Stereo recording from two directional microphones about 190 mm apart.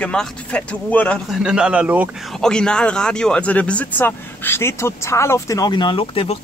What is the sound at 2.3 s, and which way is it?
Speech, 5° left (ahead or behind).